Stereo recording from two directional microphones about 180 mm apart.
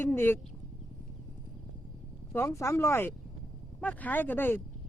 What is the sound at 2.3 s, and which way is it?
Speech, 15° left (ahead or behind).